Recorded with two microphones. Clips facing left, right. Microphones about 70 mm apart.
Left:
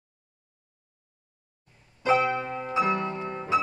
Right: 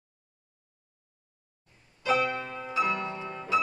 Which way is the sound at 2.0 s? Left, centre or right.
Left.